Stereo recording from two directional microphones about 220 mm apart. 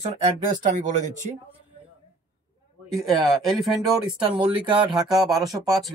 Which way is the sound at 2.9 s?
Centre (ahead or behind).